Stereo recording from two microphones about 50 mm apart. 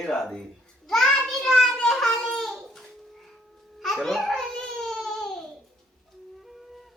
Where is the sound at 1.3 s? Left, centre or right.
Centre.